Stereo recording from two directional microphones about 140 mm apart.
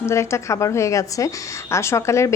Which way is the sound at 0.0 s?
20° left (ahead or behind).